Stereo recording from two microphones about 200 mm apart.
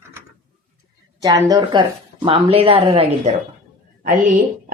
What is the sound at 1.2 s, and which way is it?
Speech, 20° right (ahead or behind).